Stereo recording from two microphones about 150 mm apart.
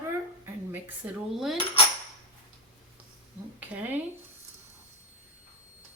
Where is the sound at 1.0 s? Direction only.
10° right (ahead or behind).